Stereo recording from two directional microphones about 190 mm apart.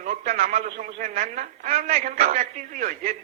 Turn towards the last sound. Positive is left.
turn(degrees=-45)  # may be behind; listen again after turning